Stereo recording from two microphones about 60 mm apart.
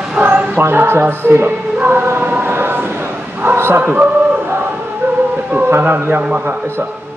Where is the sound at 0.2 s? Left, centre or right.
Right.